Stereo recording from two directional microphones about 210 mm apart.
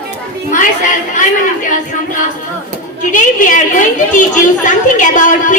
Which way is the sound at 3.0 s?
40° left (ahead or behind).